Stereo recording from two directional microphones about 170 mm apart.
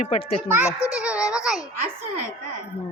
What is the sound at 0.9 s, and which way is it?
Music, 5° right (ahead or behind).